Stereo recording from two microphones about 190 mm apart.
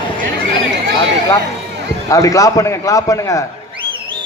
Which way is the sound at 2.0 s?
15° left (ahead or behind).